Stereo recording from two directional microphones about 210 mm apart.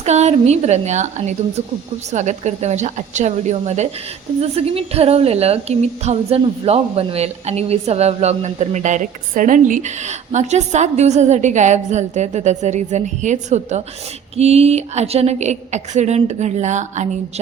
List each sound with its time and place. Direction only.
0.0 s a woman's voice: 30° right (ahead or behind)